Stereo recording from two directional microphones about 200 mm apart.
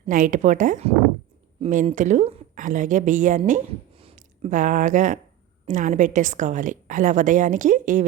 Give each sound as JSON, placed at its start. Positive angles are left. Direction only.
{"t": 0.1, "sound": "a woman's voice", "side_deg": -40}